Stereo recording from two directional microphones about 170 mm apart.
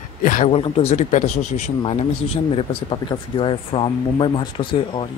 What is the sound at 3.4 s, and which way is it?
Speech, 30° left (ahead or behind).